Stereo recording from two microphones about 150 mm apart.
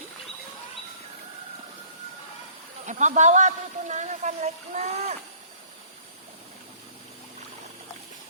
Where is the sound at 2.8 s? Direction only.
55° right (ahead or behind).